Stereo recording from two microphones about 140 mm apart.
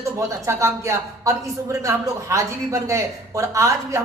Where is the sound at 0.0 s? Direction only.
20° right (ahead or behind).